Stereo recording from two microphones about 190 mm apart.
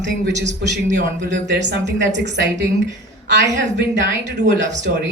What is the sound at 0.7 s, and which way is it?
Speech, 65° right (ahead or behind).